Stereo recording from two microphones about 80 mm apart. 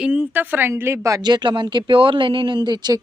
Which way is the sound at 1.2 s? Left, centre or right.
Right.